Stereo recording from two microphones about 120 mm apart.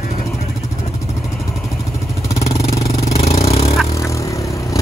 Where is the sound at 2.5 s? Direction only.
30° left (ahead or behind).